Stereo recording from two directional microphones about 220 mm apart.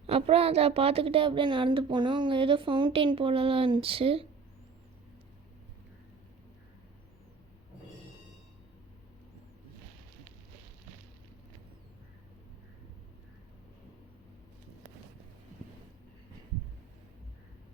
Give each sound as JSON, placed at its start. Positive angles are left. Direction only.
{"t": 0.1, "sound": "a woman's voice", "side_deg": -25}